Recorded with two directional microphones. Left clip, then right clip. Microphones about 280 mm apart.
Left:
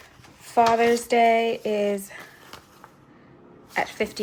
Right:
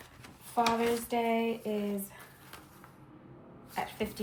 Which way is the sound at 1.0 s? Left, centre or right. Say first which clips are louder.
Left 12 dB; left.